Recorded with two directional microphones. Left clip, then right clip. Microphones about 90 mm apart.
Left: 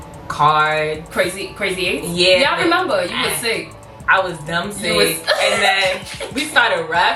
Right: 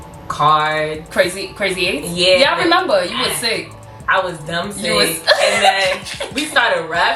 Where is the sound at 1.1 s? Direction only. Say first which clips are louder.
Right 7 dB; 20° right (ahead or behind).